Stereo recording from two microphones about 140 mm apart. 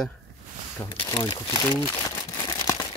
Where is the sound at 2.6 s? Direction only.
30° left (ahead or behind).